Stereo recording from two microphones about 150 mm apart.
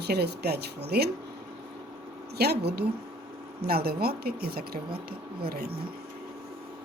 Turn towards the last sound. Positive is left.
turn(degrees=-90)